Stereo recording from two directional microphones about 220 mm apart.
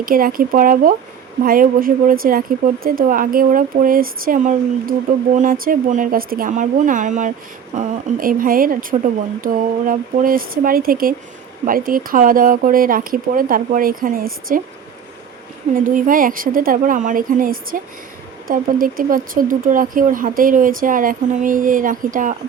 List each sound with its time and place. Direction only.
0.0 s speech: 40° right (ahead or behind)
15.7 s speech: 35° right (ahead or behind)